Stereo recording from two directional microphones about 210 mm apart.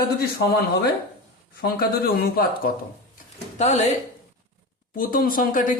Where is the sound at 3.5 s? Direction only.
35° left (ahead or behind).